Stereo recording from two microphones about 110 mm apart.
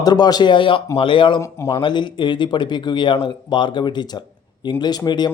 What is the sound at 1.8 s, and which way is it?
Speech, 45° left (ahead or behind).